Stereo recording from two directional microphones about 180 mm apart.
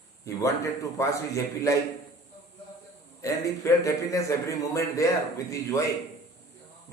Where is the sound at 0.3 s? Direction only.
20° left (ahead or behind).